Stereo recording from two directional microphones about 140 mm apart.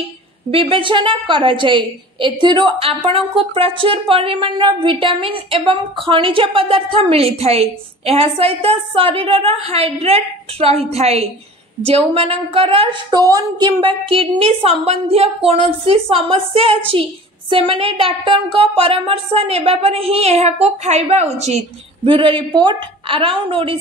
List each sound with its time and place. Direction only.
0.5 s a woman's voice: 40° right (ahead or behind)
22.0 s a woman's voice: 40° right (ahead or behind)